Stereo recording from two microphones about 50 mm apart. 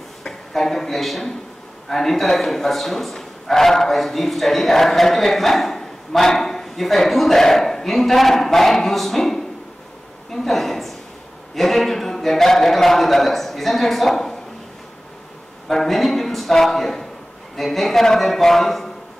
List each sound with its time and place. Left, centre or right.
0.2 s a man's voice: centre
15.7 s a man's voice: centre